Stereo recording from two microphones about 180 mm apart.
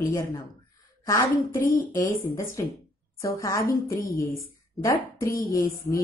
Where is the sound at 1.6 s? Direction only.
50° left (ahead or behind).